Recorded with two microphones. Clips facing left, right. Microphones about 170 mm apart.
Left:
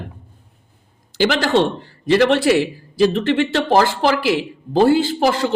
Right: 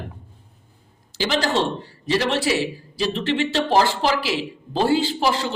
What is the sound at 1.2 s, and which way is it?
A man's voice, 55° left (ahead or behind).